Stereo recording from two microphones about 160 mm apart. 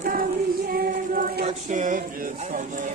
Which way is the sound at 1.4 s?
50° right (ahead or behind).